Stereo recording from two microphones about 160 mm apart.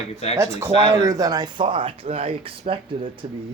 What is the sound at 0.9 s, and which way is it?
Speech, 20° right (ahead or behind).